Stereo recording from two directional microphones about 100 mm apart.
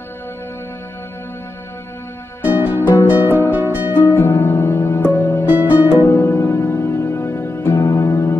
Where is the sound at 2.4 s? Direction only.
20° right (ahead or behind).